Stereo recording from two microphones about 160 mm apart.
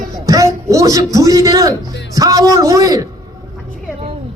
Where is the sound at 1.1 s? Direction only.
20° right (ahead or behind).